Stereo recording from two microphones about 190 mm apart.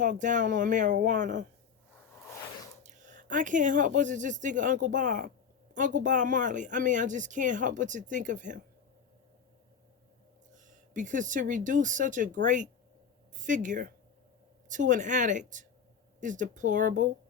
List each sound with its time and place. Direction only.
0.0 s speech: 40° right (ahead or behind)
2.8 s speech: 40° right (ahead or behind)
10.5 s speech: 40° right (ahead or behind)